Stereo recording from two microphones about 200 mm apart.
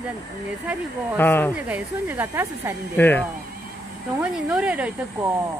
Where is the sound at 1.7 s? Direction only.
10° right (ahead or behind).